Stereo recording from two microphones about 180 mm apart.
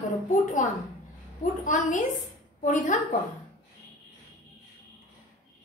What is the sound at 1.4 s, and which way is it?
A woman's voice, 45° left (ahead or behind).